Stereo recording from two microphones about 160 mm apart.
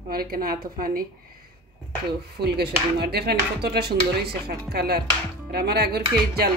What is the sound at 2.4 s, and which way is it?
Speech, 85° right.